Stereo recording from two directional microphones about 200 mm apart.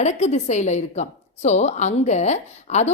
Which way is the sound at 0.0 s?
35° left (ahead or behind).